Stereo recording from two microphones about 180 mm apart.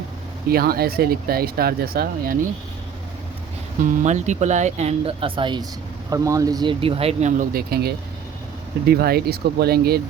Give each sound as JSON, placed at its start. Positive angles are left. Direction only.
{"t": 0.4, "sound": "speech", "side_deg": -55}
{"t": 3.8, "sound": "speech", "side_deg": -40}